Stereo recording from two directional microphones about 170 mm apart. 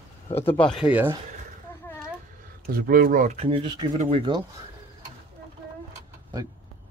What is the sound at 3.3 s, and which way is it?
Speech, 35° right (ahead or behind).